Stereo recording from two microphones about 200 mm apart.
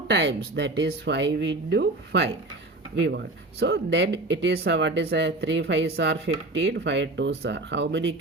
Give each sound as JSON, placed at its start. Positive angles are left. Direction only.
{"t": 0.1, "sound": "speech", "side_deg": -60}